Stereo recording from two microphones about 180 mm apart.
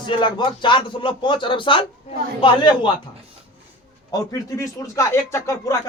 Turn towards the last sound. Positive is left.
turn(degrees=15)  # may be behind; listen again after turning